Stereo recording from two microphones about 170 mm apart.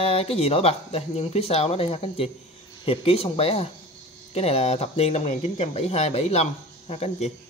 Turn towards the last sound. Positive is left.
turn(degrees=40)  # may be behind; listen again after turning